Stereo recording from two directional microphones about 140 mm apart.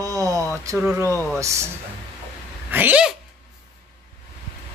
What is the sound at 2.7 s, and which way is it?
Speech, 10° right (ahead or behind).